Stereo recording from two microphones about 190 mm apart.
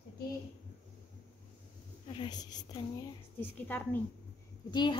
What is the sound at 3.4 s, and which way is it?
Speech, 10° left (ahead or behind).